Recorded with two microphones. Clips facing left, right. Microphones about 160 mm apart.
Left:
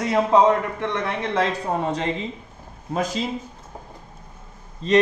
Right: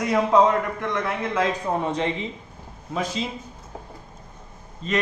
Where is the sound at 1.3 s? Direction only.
35° left (ahead or behind).